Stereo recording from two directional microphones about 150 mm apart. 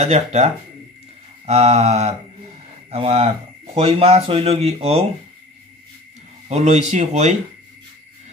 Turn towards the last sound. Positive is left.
turn(degrees=-50)  # may be behind; listen again after turning